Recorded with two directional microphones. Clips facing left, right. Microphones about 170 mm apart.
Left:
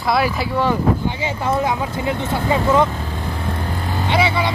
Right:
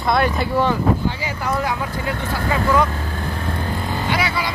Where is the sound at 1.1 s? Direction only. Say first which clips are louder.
Left 3 dB; 25° left (ahead or behind).